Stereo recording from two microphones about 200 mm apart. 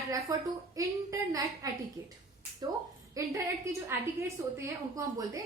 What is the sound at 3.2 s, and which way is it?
A woman's voice, 15° right (ahead or behind).